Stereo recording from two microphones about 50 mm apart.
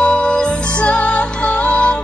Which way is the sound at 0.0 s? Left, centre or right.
Centre.